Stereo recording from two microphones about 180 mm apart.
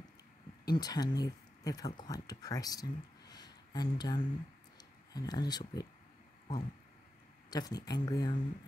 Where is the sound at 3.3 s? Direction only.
20° left (ahead or behind).